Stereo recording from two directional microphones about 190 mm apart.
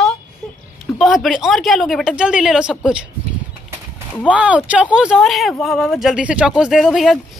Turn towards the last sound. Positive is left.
turn(degrees=0)  # may be behind; listen again after turning